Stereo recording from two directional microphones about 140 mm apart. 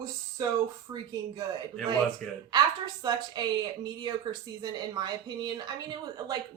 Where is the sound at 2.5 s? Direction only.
30° right (ahead or behind).